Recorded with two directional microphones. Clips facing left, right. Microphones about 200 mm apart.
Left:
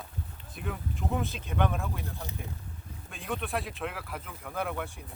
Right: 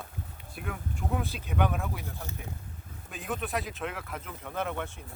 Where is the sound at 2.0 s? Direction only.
15° left (ahead or behind).